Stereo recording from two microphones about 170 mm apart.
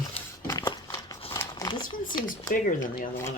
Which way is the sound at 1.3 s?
20° left (ahead or behind).